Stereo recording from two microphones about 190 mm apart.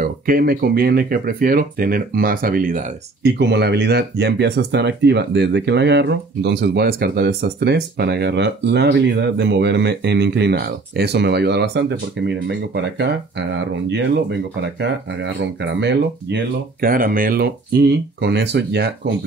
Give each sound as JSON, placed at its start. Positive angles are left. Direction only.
{"t": 0.0, "sound": "speech", "side_deg": -50}
{"t": 3.3, "sound": "speech", "side_deg": -60}